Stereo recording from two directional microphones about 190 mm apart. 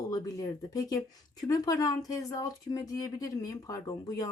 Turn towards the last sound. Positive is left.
turn(degrees=20)  # may be behind; listen again after turning